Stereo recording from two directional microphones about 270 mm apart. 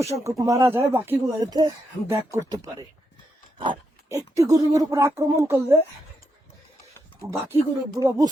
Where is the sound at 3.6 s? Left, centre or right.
Centre.